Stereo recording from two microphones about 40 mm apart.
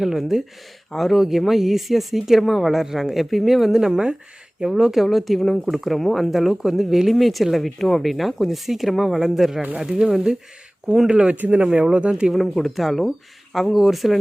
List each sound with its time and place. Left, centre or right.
0.0 s speech: centre
4.8 s speech: centre
7.1 s speech: centre
11.1 s speech: right
12.3 s speech: centre